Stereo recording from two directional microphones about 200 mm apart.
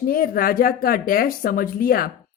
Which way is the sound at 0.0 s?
45° left (ahead or behind).